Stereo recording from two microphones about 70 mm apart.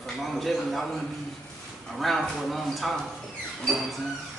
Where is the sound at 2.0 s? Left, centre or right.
Centre.